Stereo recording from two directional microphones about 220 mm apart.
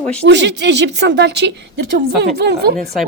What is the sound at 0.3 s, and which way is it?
A woman's voice, 50° right (ahead or behind).